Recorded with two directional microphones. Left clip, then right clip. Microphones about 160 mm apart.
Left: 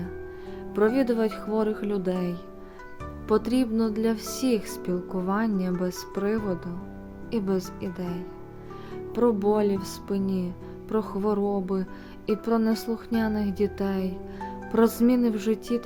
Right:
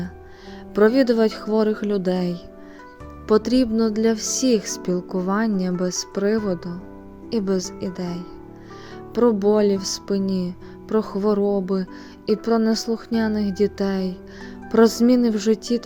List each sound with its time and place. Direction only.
0.7 s speech: 40° right (ahead or behind)